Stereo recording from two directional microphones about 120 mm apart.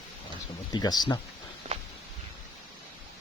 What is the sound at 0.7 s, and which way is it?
Speech, 35° left (ahead or behind).